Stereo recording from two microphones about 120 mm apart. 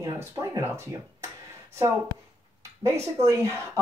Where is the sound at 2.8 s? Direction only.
25° right (ahead or behind).